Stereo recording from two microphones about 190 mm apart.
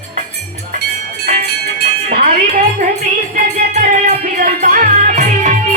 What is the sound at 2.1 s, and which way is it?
Music, 50° right (ahead or behind).